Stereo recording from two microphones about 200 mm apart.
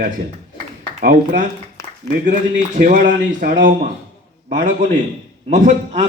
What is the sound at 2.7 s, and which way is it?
A man's voice, 40° right (ahead or behind).